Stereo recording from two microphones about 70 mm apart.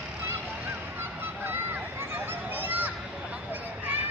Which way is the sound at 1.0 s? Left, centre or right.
Right.